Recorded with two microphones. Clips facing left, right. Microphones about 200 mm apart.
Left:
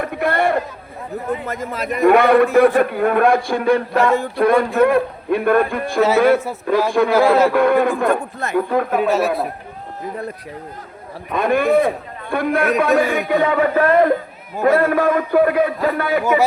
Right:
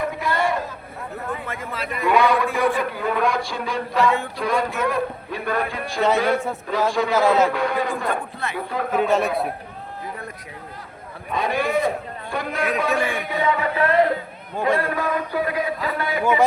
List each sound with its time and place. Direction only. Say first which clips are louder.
0.0 s chatter: left 4 dB; 60° left (ahead or behind)
1.5 s a man's voice: left 6 dB; 40° left (ahead or behind)
2.0 s a man's voice: left 7 dB; 60° left (ahead or behind)
9.0 s a man's voice: left 3 dB; 5° left (ahead or behind)
11.3 s a man's voice: left 7 dB; 55° left (ahead or behind)